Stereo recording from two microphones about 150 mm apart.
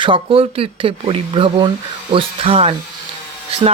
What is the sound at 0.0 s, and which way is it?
Speech, 35° right (ahead or behind).